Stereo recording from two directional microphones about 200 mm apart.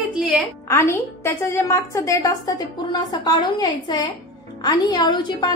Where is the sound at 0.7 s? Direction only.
10° left (ahead or behind).